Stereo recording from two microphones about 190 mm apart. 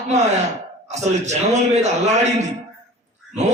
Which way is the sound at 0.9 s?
35° right (ahead or behind).